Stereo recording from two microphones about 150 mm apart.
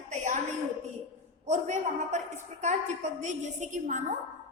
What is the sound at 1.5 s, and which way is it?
A woman's voice, 55° right (ahead or behind).